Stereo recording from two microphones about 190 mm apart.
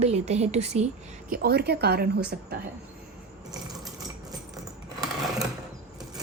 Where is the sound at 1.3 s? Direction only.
55° right (ahead or behind).